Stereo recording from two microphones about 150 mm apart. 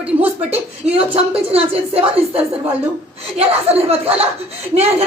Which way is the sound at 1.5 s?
40° right (ahead or behind).